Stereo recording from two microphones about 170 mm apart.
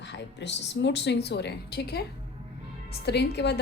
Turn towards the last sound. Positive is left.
turn(degrees=80)